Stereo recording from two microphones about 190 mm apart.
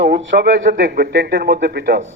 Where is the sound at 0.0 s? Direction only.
55° right (ahead or behind).